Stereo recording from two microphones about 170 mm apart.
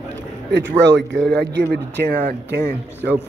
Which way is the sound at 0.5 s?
90° right.